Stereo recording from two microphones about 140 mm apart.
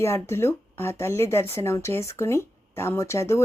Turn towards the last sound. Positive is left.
turn(degrees=20)  # may be behind; listen again after turning